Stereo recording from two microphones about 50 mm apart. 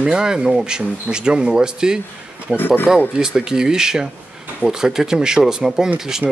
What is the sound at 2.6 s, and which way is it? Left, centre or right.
Speech, left.